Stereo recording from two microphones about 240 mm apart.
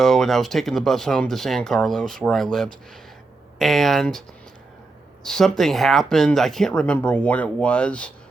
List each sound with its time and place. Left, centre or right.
0.0 s speech: centre
5.2 s speech: centre